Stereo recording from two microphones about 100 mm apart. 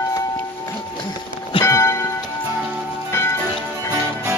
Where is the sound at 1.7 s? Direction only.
30° left (ahead or behind).